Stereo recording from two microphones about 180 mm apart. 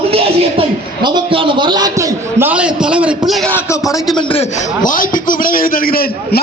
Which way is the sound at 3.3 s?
Centre (ahead or behind).